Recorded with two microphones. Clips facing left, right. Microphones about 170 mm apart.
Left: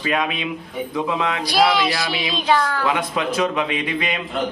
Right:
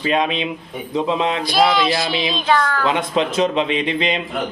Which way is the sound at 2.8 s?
25° right (ahead or behind).